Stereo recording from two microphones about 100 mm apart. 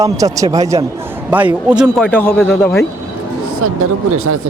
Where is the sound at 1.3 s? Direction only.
15° right (ahead or behind).